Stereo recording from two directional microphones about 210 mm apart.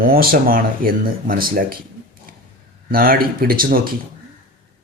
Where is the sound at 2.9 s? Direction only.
45° right (ahead or behind).